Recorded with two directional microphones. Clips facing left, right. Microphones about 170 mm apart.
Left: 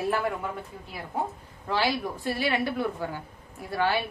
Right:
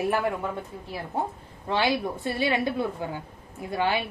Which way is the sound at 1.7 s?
20° right (ahead or behind).